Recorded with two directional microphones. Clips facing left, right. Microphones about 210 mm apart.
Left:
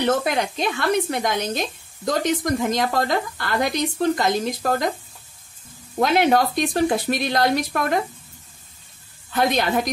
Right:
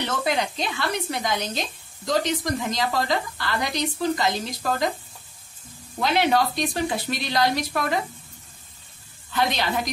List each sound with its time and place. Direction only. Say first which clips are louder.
0.0 s speech: left 4 dB; 50° left (ahead or behind)
5.9 s speech: left 4 dB; 50° left (ahead or behind)
9.3 s speech: left 4 dB; 50° left (ahead or behind)